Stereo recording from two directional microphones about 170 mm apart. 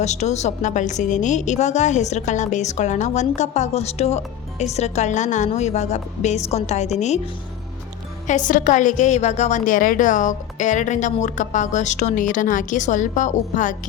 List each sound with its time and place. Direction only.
0.0 s a woman's voice: 40° left (ahead or behind)
8.3 s a woman's voice: 50° left (ahead or behind)